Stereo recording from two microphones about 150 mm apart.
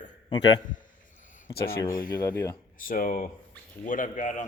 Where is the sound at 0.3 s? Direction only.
30° left (ahead or behind).